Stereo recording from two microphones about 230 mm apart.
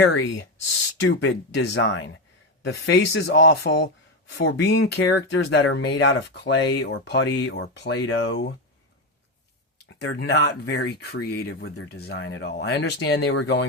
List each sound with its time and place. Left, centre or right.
0.0 s speech: left
10.0 s speech: left